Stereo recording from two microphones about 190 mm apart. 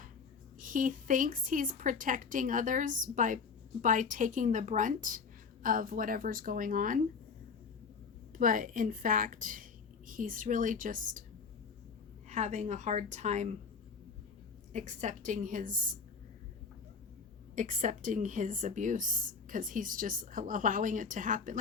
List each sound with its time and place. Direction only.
0.6 s a woman's voice: 45° right (ahead or behind)
8.3 s a woman's voice: 45° right (ahead or behind)
12.3 s a woman's voice: 40° right (ahead or behind)
14.7 s a woman's voice: 40° right (ahead or behind)
17.5 s a woman's voice: 40° right (ahead or behind)